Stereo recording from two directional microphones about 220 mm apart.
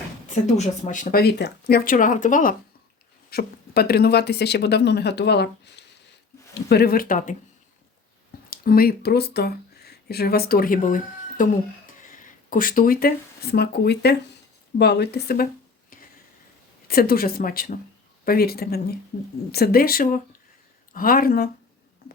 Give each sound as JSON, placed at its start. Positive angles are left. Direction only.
{"t": 0.4, "sound": "speech", "side_deg": 30}
{"t": 8.4, "sound": "speech", "side_deg": 40}
{"t": 16.9, "sound": "speech", "side_deg": 40}